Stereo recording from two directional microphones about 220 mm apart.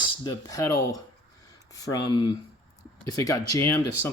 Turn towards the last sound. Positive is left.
turn(degrees=15)  # may be behind; listen again after turning